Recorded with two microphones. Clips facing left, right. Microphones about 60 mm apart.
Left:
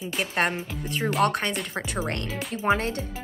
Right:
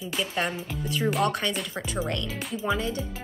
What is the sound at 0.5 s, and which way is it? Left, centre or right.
Speech, left.